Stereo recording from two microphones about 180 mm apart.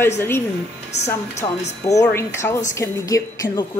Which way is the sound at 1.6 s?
40° left (ahead or behind).